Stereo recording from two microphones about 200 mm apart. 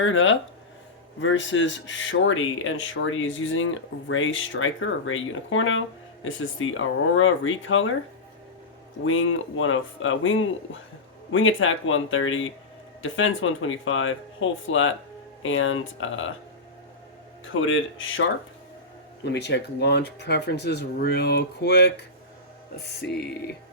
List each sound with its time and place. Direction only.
0.0 s speech: 75° left (ahead or behind)
9.0 s speech: 80° left
17.5 s speech: 80° left
19.2 s speech: 60° left (ahead or behind)
22.8 s music: 50° left (ahead or behind)